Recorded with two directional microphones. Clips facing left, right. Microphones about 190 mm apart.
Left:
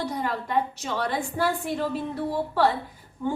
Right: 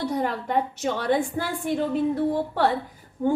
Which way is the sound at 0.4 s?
50° right (ahead or behind).